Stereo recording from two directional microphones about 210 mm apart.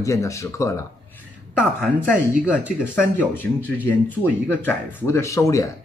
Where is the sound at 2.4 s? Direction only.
5° right (ahead or behind).